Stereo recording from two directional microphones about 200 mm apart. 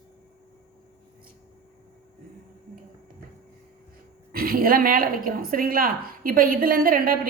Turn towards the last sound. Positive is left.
turn(degrees=-45)  # may be behind; listen again after turning